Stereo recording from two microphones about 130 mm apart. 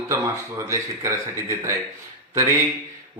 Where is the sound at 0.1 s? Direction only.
25° right (ahead or behind).